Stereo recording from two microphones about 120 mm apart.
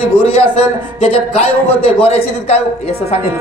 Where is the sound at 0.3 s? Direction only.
50° left (ahead or behind).